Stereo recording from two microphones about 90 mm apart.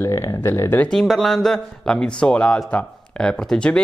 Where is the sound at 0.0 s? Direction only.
30° left (ahead or behind).